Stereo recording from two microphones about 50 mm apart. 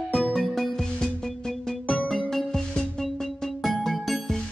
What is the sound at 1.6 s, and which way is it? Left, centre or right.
Music, left.